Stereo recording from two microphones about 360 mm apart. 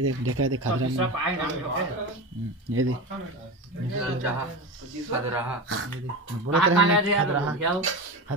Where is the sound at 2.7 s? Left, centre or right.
Right.